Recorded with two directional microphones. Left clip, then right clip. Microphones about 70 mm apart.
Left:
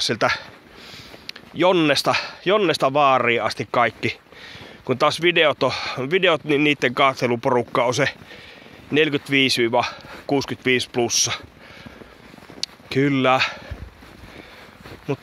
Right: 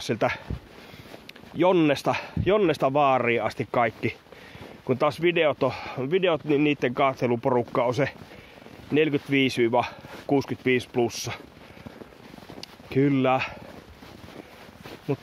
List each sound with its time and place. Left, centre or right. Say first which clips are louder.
0.0 s speech: left 6 dB; centre
1.2 s speech: left 4 dB; centre
3.4 s speech: left 4 dB; centre
3.8 s speech: left 5 dB; centre
9.3 s speech: left 4 dB; centre
12.5 s a sound: left 4 dB; centre
13.0 s speech: left 5 dB; centre